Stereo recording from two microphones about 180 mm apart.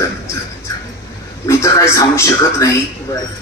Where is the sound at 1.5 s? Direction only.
15° left (ahead or behind).